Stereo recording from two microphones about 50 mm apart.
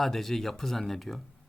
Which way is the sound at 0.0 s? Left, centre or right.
Centre.